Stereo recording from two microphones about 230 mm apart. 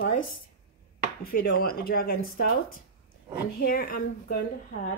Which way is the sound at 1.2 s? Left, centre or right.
Left.